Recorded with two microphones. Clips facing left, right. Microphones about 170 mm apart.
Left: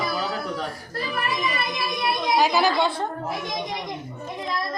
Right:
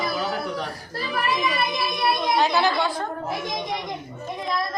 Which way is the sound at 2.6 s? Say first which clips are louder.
Left 1 dB; 25° left (ahead or behind).